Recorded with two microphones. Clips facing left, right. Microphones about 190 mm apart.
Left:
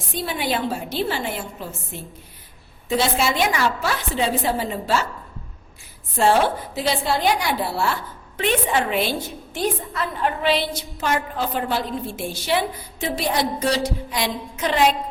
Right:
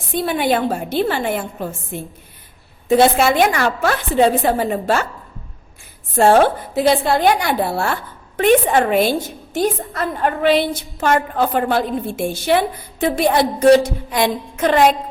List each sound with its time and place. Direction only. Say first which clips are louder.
0.1 s a woman's voice: right 7 dB; 55° right (ahead or behind)
6.1 s a woman's voice: right 6 dB; 50° right (ahead or behind)